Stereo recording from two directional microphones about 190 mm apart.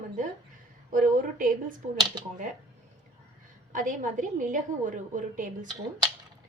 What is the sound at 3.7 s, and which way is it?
A woman's voice, 45° right (ahead or behind).